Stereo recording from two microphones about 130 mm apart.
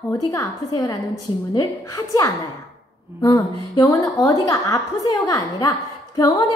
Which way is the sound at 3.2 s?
30° left (ahead or behind).